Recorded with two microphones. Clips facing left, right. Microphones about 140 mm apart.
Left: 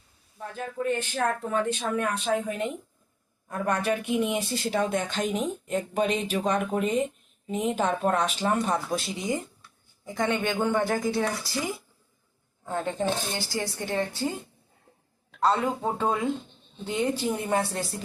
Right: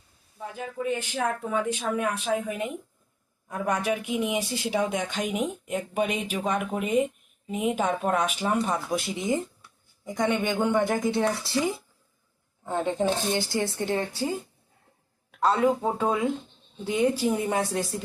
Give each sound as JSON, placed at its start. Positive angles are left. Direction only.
{"t": 0.3, "sound": "a woman's voice", "side_deg": -10}
{"t": 15.4, "sound": "speech", "side_deg": -10}